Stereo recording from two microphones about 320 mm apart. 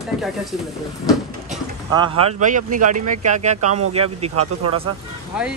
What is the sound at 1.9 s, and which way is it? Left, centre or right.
Speech, centre.